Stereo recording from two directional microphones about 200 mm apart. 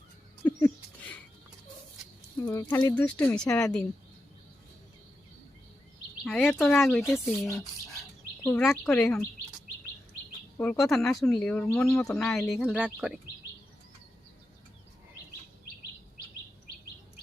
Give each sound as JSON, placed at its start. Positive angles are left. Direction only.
{"t": 0.4, "sound": "a sound", "side_deg": 10}
{"t": 2.4, "sound": "speech", "side_deg": 15}
{"t": 6.2, "sound": "speech", "side_deg": 5}
{"t": 8.4, "sound": "speech", "side_deg": 10}
{"t": 10.6, "sound": "speech", "side_deg": 5}